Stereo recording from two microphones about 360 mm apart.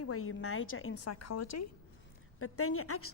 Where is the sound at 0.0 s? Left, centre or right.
Left.